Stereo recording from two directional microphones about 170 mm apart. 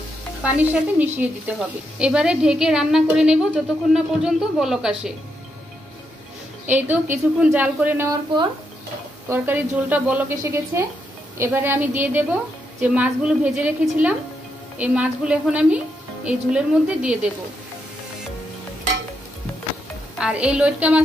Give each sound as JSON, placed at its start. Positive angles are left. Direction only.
{"t": 0.4, "sound": "a woman's voice", "side_deg": -5}
{"t": 6.7, "sound": "a woman's voice", "side_deg": -10}
{"t": 9.3, "sound": "a woman's voice", "side_deg": -10}
{"t": 20.2, "sound": "a woman's voice", "side_deg": -5}